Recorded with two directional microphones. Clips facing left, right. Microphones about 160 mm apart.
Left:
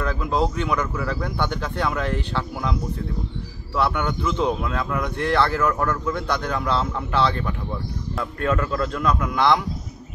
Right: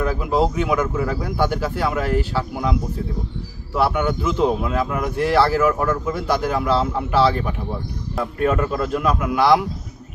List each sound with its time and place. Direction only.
0.0 s speech: 10° right (ahead or behind)
3.7 s speech: 5° right (ahead or behind)